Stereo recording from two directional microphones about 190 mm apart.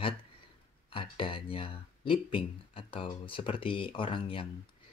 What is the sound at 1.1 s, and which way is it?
Speech, 30° left (ahead or behind).